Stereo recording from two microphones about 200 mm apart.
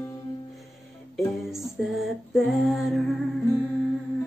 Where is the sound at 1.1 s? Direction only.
Centre (ahead or behind).